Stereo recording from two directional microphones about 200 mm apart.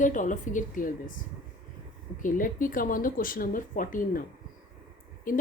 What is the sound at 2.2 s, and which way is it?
A woman's voice, 45° left (ahead or behind).